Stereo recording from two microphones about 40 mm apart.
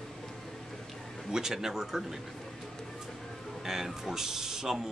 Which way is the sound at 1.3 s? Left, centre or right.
Centre.